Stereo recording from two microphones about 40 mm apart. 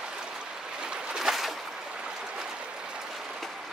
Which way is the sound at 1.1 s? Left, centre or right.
Centre.